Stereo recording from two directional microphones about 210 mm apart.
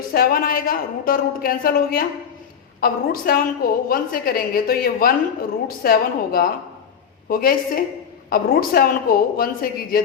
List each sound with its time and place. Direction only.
0.1 s a woman's voice: 45° left (ahead or behind)